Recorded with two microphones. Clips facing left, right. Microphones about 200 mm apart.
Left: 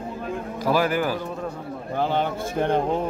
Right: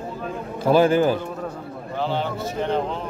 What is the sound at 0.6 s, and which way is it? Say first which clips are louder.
Speech: right 6 dB; 25° right (ahead or behind).